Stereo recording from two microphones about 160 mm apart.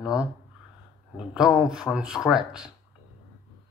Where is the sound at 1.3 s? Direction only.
5° right (ahead or behind).